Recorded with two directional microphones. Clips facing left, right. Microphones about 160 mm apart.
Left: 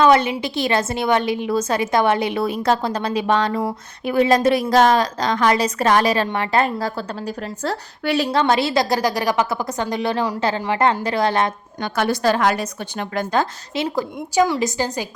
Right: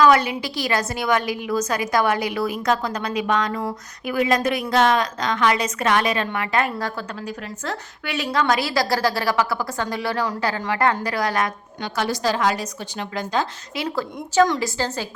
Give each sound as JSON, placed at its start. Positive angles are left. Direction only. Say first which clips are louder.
{"t": 0.0, "sound": "a woman's voice", "louder": "left 2 dB", "side_deg": 25}
{"t": 11.8, "sound": "a woman's voice", "louder": "left 4 dB", "side_deg": 55}
{"t": 13.7, "sound": "a woman's voice", "louder": "left 4 dB", "side_deg": 25}
{"t": 14.3, "sound": "a woman's voice", "louder": "even", "side_deg": 10}